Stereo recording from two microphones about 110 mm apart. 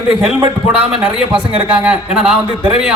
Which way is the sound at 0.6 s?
5° right (ahead or behind).